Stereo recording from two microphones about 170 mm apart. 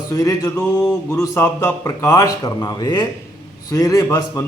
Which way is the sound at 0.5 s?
5° left (ahead or behind).